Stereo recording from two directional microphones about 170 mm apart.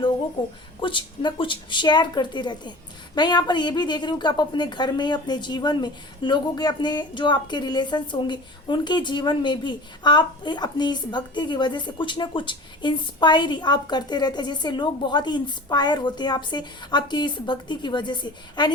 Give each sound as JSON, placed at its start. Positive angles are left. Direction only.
{"t": 0.8, "sound": "a woman's voice", "side_deg": 30}